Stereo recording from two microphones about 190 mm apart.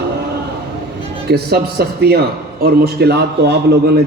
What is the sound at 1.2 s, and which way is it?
A man's voice, 60° right (ahead or behind).